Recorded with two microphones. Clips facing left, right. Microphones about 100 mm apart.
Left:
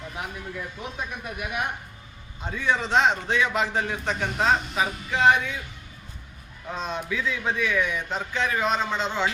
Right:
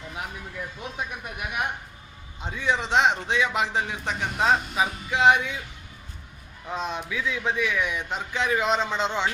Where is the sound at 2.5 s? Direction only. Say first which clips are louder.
Left 1 dB; 15° right (ahead or behind).